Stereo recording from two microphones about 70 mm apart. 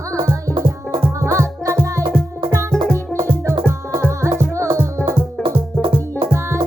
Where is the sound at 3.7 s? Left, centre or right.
Right.